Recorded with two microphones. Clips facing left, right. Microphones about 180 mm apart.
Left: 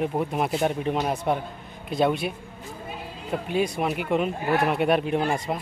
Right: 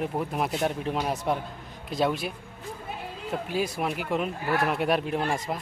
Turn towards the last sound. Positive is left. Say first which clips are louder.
# left 3 dB
turn(degrees=0)  # may be behind; listen again after turning